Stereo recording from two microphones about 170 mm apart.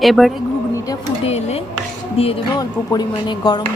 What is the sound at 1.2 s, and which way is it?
Speech, 40° left (ahead or behind).